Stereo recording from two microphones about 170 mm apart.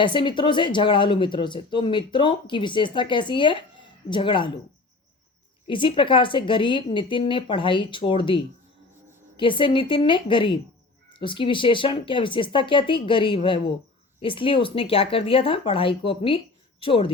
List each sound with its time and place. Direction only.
0.0 s speech: 30° left (ahead or behind)
5.6 s speech: 30° left (ahead or behind)
9.4 s speech: 30° left (ahead or behind)